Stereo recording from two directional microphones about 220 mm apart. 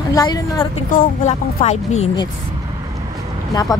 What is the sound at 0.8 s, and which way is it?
Speech, 35° left (ahead or behind).